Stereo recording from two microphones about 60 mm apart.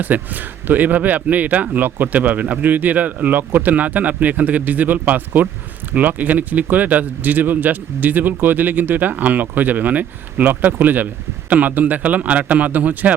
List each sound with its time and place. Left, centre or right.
0.0 s speech: right